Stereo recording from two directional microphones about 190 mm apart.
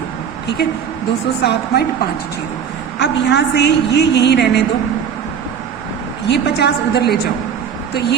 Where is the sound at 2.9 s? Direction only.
65° left (ahead or behind).